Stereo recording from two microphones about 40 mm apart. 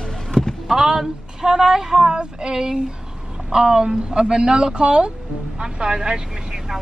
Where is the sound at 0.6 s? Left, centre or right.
Centre.